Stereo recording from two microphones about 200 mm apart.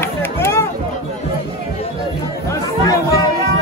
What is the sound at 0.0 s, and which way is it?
Music, 10° left (ahead or behind).